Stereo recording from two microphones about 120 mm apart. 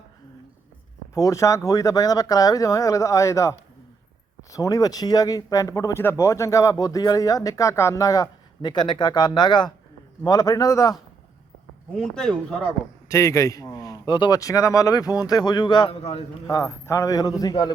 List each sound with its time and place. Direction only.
1.1 s a man's voice: 25° left (ahead or behind)
11.9 s speech: 5° left (ahead or behind)
13.1 s a man's voice: 25° left (ahead or behind)
15.9 s a man's voice: 55° left (ahead or behind)
16.5 s a man's voice: 25° left (ahead or behind)